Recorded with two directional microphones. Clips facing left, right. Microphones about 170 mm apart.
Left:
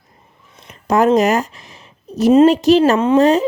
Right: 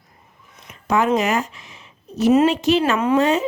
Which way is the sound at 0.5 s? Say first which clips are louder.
Left 4 dB; 30° left (ahead or behind).